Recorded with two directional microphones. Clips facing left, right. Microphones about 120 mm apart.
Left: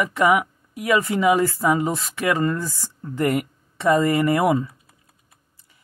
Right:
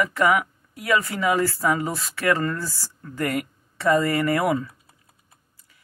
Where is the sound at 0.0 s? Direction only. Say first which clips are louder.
Left 2 dB; 15° left (ahead or behind).